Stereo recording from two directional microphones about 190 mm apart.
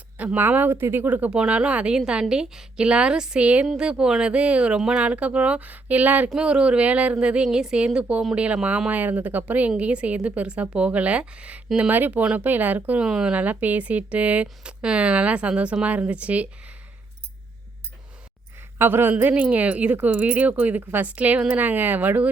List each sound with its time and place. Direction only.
0.2 s speech: 10° right (ahead or behind)
18.8 s speech: 10° right (ahead or behind)